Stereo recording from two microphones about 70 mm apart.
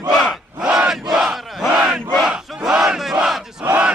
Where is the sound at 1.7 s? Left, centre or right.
Centre.